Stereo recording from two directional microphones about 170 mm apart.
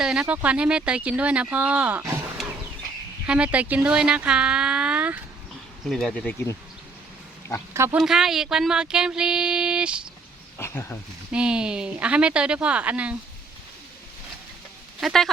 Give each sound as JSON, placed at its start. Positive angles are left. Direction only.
{"t": 0.0, "sound": "speech", "side_deg": -5}
{"t": 5.9, "sound": "speech", "side_deg": 5}
{"t": 7.7, "sound": "speech", "side_deg": -15}
{"t": 8.0, "sound": "speech", "side_deg": -5}
{"t": 10.6, "sound": "speech", "side_deg": 15}
{"t": 11.3, "sound": "speech", "side_deg": -5}
{"t": 15.0, "sound": "speech", "side_deg": 0}